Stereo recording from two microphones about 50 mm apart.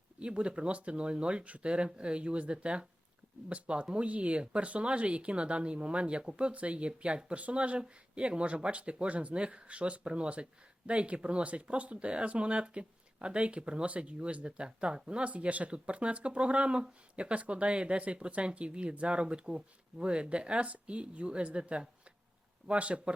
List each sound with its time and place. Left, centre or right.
0.2 s speech: right